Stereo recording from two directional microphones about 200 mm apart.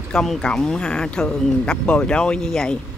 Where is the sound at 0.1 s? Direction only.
5° left (ahead or behind).